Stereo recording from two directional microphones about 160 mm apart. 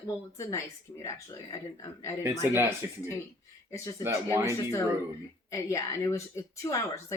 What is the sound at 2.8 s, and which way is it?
Speech, 20° right (ahead or behind).